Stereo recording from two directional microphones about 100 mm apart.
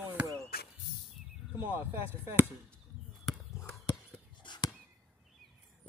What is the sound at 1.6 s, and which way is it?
Speech, 20° right (ahead or behind).